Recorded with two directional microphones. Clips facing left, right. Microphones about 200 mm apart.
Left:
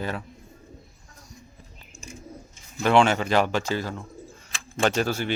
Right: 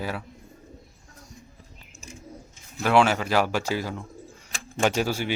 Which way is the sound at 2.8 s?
5° right (ahead or behind).